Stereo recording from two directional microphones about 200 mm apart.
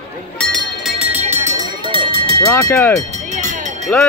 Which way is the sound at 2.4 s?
15° left (ahead or behind).